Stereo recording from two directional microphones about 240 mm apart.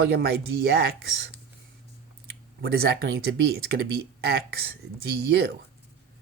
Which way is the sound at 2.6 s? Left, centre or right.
Right.